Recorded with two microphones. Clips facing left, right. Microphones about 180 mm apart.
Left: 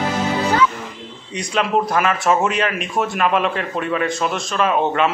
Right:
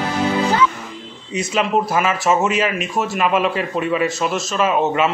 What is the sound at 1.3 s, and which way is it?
Speech, 5° right (ahead or behind).